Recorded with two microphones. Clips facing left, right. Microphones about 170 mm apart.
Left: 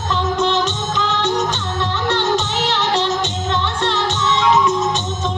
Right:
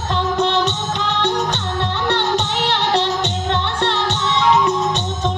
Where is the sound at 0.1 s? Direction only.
60° right (ahead or behind).